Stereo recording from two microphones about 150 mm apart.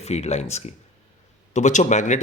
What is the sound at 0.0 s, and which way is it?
Speech, 45° left (ahead or behind).